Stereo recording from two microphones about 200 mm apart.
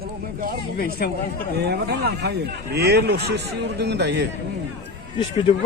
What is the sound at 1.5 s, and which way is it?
Speech, 55° right (ahead or behind).